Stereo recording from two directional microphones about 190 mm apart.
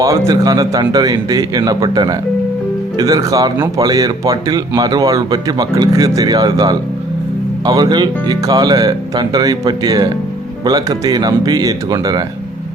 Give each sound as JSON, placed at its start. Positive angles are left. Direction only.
{"t": 0.3, "sound": "speech", "side_deg": -20}